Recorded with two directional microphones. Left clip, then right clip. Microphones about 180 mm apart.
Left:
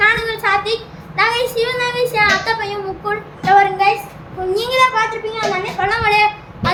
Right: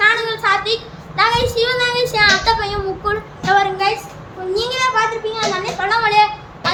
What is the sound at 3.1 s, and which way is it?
Speech, 10° right (ahead or behind).